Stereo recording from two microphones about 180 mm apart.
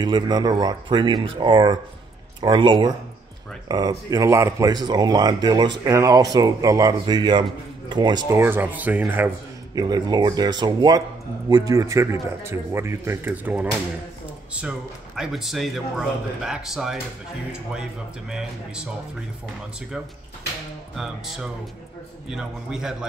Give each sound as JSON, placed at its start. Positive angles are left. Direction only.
{"t": 0.0, "sound": "speech", "side_deg": -25}
{"t": 9.8, "sound": "speech", "side_deg": -20}
{"t": 20.9, "sound": "speech", "side_deg": -5}